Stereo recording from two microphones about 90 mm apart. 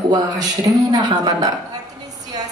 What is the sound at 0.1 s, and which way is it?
Speech, 45° right (ahead or behind).